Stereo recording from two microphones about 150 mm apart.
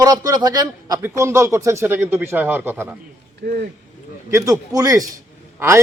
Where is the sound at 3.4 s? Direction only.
90° right.